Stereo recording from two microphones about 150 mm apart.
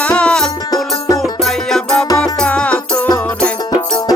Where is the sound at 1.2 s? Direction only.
Centre (ahead or behind).